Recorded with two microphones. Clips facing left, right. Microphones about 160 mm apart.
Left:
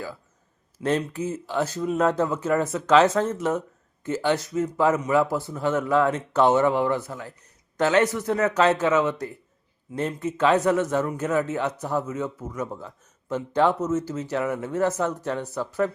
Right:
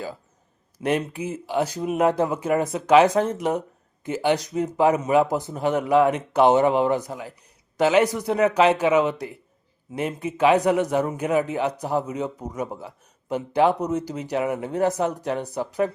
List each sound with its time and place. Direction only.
0.8 s a man's voice: 15° right (ahead or behind)